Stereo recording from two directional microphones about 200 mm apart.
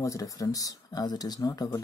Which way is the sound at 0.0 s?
15° left (ahead or behind).